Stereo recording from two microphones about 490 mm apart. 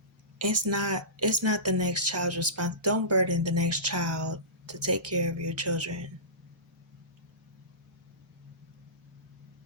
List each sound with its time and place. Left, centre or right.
0.4 s speech: right